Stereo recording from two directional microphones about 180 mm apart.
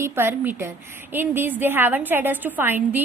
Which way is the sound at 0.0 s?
15° right (ahead or behind).